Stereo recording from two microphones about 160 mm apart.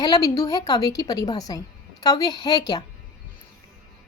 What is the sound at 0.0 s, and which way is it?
Speech, 25° left (ahead or behind).